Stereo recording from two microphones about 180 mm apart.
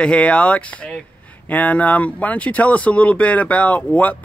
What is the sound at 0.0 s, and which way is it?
Speech, 5° left (ahead or behind).